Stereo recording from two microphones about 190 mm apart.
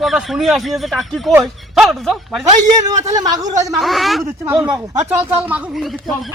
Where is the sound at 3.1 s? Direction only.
20° right (ahead or behind).